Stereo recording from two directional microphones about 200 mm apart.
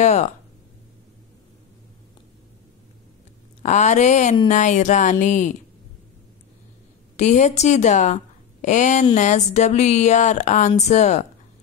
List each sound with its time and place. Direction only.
0.0 s speech: 35° left (ahead or behind)
3.6 s speech: 35° left (ahead or behind)
7.2 s speech: 35° left (ahead or behind)